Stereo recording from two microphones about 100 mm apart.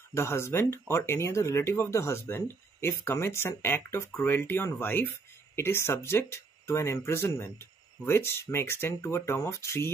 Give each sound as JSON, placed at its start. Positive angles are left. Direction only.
{"t": 0.1, "sound": "speech", "side_deg": 25}